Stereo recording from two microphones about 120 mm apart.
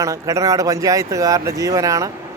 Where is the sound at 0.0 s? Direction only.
25° right (ahead or behind).